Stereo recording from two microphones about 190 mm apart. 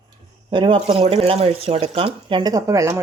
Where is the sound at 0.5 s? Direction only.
25° right (ahead or behind).